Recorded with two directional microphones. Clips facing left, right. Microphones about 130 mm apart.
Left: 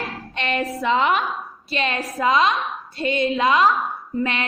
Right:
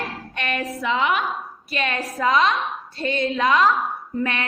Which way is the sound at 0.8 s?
35° left (ahead or behind).